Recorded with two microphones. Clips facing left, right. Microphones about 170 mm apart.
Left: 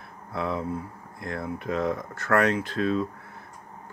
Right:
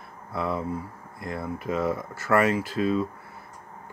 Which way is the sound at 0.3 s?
Centre (ahead or behind).